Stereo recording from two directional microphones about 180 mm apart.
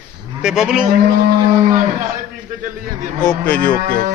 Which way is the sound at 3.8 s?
55° right (ahead or behind).